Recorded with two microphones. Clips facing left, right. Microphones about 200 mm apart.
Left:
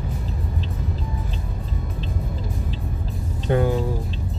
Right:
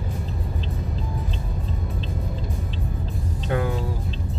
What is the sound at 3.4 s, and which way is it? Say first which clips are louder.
Music: left 5 dB; 30° left (ahead or behind).